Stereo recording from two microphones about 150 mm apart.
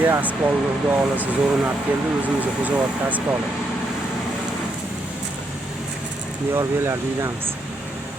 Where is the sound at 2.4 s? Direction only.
10° right (ahead or behind).